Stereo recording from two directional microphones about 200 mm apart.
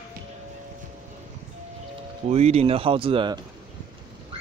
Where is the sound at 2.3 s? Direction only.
30° right (ahead or behind).